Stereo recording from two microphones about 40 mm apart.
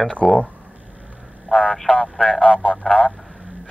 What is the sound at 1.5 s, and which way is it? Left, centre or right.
Speech, left.